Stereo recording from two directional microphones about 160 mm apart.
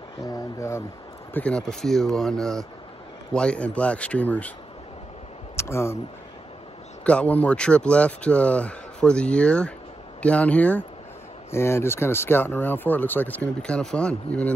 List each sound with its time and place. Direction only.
0.3 s speech: 20° left (ahead or behind)
1.3 s speech: 5° left (ahead or behind)
5.6 s speech: 15° left (ahead or behind)
7.1 s speech: 10° left (ahead or behind)